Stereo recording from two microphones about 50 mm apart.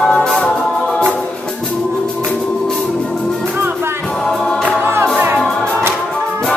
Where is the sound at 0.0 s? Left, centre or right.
Centre.